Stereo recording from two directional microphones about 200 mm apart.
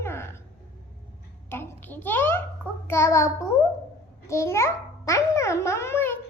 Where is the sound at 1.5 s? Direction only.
10° left (ahead or behind).